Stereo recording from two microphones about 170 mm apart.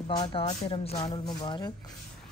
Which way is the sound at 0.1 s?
30° left (ahead or behind).